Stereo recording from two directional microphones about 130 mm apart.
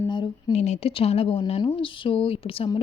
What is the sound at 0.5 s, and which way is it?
A woman's voice, 60° left (ahead or behind).